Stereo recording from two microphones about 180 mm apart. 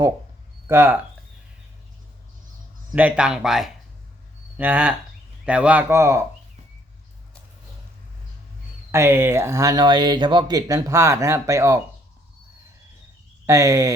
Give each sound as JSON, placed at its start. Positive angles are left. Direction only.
{"t": 0.7, "sound": "speech", "side_deg": -10}
{"t": 2.9, "sound": "speech", "side_deg": -5}
{"t": 8.9, "sound": "speech", "side_deg": -15}
{"t": 13.4, "sound": "speech", "side_deg": -15}